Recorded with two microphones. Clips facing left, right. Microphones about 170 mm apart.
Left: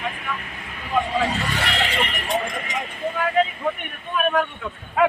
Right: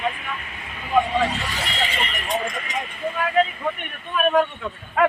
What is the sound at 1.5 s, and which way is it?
Neigh, 70° left (ahead or behind).